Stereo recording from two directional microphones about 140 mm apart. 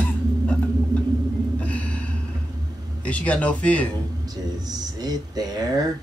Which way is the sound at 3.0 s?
10° left (ahead or behind).